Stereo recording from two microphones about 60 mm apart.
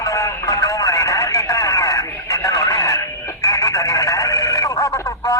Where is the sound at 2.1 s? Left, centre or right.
Left.